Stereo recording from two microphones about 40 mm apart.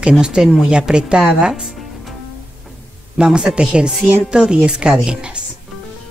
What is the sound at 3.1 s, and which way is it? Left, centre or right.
A man's voice, right.